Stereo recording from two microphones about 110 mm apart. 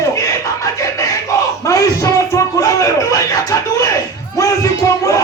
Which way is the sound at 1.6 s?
30° left (ahead or behind).